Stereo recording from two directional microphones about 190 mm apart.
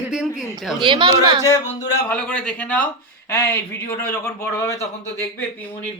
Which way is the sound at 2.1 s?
5° left (ahead or behind).